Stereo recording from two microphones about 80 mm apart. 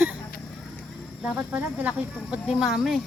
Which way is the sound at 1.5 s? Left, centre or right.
Centre.